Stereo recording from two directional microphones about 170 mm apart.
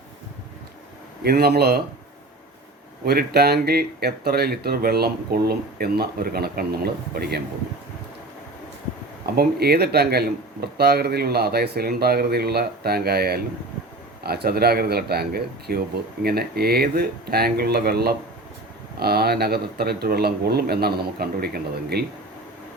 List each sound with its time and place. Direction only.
1.2 s speech: 65° right (ahead or behind)
3.0 s speech: 65° right (ahead or behind)
9.3 s speech: 65° right (ahead or behind)